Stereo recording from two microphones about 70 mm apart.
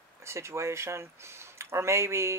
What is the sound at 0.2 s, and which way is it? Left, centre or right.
Speech, right.